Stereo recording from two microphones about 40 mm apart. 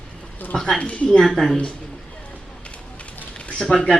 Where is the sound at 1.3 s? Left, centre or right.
Centre.